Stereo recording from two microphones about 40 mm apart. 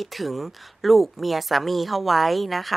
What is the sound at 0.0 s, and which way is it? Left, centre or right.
Speech, centre.